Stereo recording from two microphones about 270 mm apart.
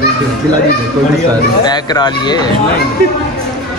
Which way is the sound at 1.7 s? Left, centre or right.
Centre.